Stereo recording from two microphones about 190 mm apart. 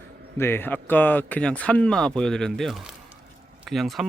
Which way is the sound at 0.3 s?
10° left (ahead or behind).